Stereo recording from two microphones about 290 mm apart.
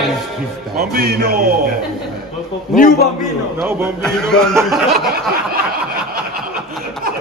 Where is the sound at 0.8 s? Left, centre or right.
Right.